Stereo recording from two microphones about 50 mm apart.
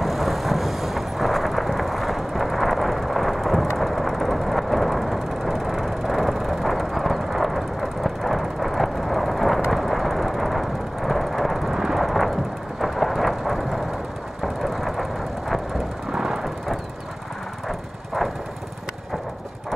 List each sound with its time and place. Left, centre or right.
0.0 s vehicle: centre
12.8 s a sound: centre
14.4 s vehicle: centre